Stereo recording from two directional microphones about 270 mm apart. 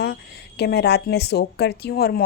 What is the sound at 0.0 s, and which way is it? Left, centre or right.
Speech, left.